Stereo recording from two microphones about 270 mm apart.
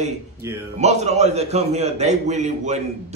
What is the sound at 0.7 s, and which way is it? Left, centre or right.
Speech, right.